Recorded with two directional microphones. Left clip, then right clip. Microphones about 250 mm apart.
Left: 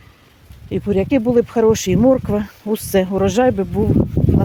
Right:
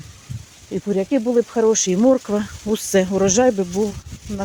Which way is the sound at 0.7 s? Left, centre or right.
Centre.